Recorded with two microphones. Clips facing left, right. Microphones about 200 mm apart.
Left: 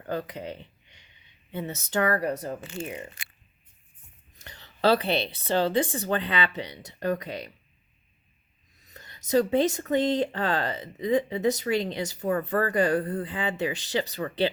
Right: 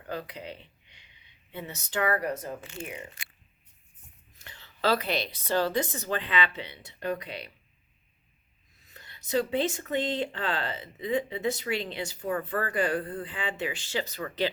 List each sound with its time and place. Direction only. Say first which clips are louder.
0.1 s speech: left 5 dB; 40° left (ahead or behind)
4.4 s speech: left 5 dB; 40° left (ahead or behind)
8.8 s speech: left 3 dB; 40° left (ahead or behind)